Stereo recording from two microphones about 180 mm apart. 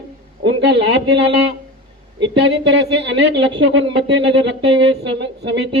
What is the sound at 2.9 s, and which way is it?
Speech, 90° right.